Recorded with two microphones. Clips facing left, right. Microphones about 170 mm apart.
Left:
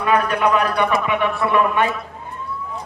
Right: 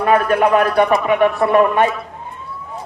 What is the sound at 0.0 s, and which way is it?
A man's voice, 45° right (ahead or behind).